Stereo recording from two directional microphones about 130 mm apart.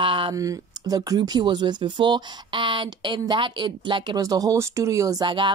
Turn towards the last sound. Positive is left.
turn(degrees=-40)  # may be behind; listen again after turning